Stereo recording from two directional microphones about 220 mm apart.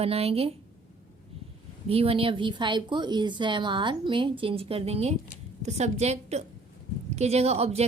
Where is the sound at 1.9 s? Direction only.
25° right (ahead or behind).